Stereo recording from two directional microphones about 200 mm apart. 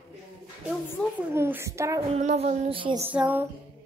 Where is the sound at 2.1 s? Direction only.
30° right (ahead or behind).